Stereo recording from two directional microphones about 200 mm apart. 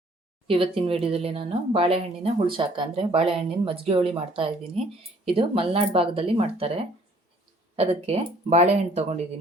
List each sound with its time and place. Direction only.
0.4 s speech: 25° right (ahead or behind)
7.8 s speech: 30° right (ahead or behind)